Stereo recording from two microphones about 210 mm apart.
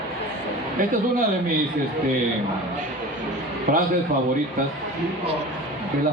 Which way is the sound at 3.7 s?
40° right (ahead or behind).